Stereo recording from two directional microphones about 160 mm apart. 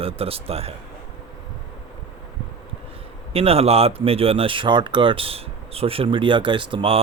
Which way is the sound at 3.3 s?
40° right (ahead or behind).